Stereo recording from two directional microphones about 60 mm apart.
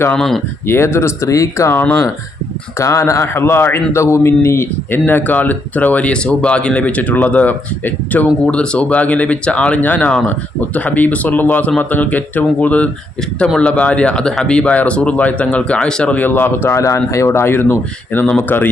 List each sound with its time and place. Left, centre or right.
0.2 s speech: centre
0.7 s a man's voice: left
1.7 s speech: left
2.7 s a man's voice: left
5.0 s speech: left; by 16.1 s centre
16.1 s speech: left
16.7 s a man's voice: left